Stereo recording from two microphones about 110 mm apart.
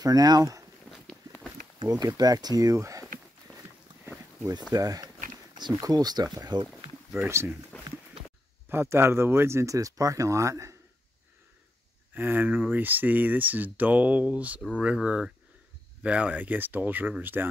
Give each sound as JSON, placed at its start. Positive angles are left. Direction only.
{"t": 0.0, "sound": "speech", "side_deg": -35}
{"t": 1.0, "sound": "walk", "side_deg": 10}
{"t": 1.9, "sound": "speech", "side_deg": -35}
{"t": 3.5, "sound": "a sound", "side_deg": 10}
{"t": 4.7, "sound": "speech", "side_deg": -35}
{"t": 7.2, "sound": "speech", "side_deg": -25}
{"t": 8.6, "sound": "speech", "side_deg": -20}
{"t": 12.1, "sound": "speech", "side_deg": -15}